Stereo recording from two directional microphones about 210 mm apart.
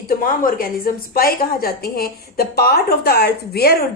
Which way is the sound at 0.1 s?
40° left (ahead or behind).